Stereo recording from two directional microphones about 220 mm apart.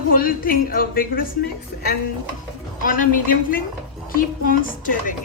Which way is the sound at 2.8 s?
40° left (ahead or behind).